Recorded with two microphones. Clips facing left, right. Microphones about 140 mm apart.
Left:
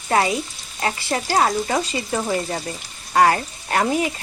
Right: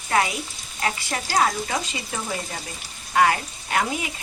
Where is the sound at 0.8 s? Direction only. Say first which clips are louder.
Left 4 dB; 35° left (ahead or behind).